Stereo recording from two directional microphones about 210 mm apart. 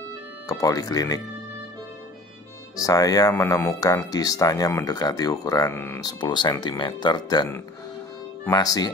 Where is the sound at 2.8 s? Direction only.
15° left (ahead or behind).